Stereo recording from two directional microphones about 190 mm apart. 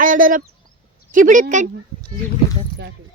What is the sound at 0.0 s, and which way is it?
Speech, 45° right (ahead or behind).